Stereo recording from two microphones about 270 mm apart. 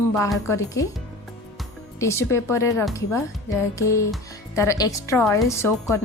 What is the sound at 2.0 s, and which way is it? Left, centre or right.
Speech, centre.